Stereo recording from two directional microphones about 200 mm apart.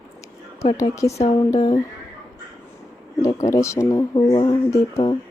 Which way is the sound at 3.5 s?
15° left (ahead or behind).